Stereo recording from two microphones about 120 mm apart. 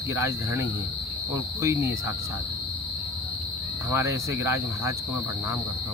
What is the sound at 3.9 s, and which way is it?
Speech, 25° right (ahead or behind).